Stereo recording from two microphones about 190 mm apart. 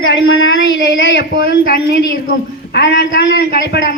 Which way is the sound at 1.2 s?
50° left (ahead or behind).